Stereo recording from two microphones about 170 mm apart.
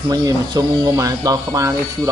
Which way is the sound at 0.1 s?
20° right (ahead or behind).